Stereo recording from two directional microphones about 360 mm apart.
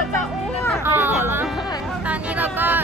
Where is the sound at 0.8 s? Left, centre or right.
Centre.